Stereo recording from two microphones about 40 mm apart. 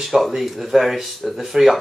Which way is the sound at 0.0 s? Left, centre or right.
Centre.